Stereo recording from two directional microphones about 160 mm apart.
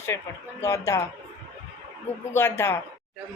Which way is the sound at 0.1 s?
20° left (ahead or behind).